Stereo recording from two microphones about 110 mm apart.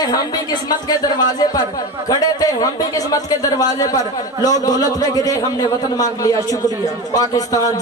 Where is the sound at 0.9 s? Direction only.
40° left (ahead or behind).